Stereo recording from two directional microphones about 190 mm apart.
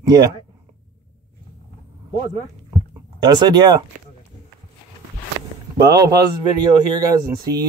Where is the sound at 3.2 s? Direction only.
20° right (ahead or behind).